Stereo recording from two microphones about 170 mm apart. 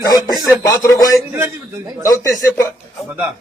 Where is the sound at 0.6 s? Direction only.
20° left (ahead or behind).